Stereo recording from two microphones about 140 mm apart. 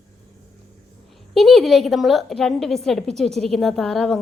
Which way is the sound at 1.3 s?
Centre (ahead or behind).